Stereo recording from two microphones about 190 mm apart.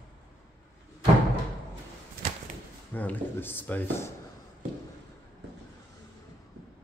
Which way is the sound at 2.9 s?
10° left (ahead or behind).